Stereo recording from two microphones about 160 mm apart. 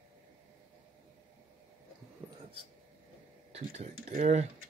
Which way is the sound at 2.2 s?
15° right (ahead or behind).